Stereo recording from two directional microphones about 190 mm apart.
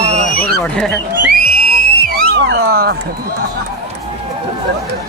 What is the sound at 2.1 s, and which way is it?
Cat, 60° right (ahead or behind).